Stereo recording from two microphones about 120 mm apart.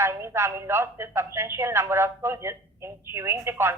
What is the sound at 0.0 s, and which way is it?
A man's voice, 20° right (ahead or behind).